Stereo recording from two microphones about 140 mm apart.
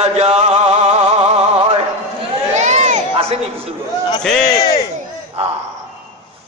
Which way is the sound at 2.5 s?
55° right (ahead or behind).